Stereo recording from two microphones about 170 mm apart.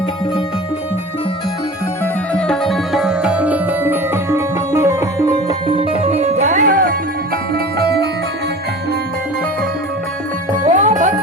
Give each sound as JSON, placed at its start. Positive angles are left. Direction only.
{"t": 2.3, "sound": "music", "side_deg": 0}
{"t": 10.8, "sound": "music", "side_deg": -45}